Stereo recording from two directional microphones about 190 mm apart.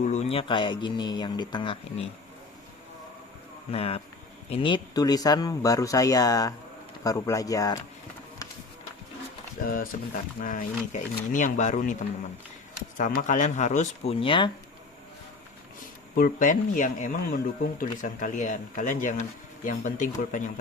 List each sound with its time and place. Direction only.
0.1 s speech: 35° left (ahead or behind)
3.7 s speech: 30° left (ahead or behind)
9.6 s speech: 50° left (ahead or behind)
13.0 s speech: 40° left (ahead or behind); by 14.5 s 25° left (ahead or behind)
16.1 s speech: 45° left (ahead or behind)